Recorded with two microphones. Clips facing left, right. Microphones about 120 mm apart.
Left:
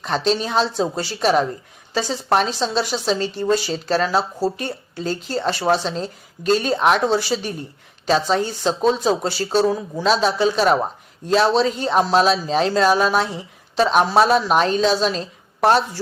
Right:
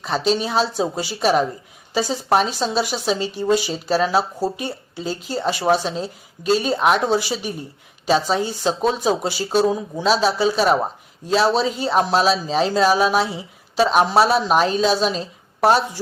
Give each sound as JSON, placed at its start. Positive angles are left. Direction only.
{"t": 0.0, "sound": "speech", "side_deg": -5}
{"t": 7.0, "sound": "speech", "side_deg": -15}
{"t": 9.9, "sound": "speech", "side_deg": 0}